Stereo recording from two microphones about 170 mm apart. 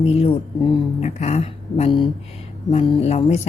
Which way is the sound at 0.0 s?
35° left (ahead or behind).